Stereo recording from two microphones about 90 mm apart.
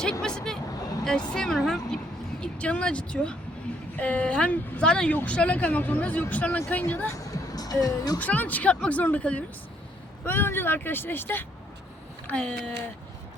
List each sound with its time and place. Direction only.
0.0 s vehicle: 10° left (ahead or behind)
1.0 s speech: 10° left (ahead or behind)
7.1 s speech: 45° left (ahead or behind)
8.2 s speech: 15° left (ahead or behind)